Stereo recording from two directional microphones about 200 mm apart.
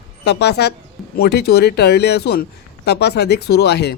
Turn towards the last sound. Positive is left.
turn(degrees=55)  # may be behind; listen again after turning